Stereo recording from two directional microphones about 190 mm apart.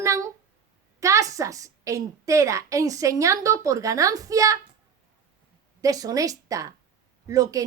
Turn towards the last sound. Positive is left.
turn(degrees=-20)  # may be behind; listen again after turning